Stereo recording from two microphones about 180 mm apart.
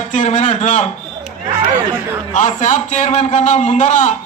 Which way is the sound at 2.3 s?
45° left (ahead or behind).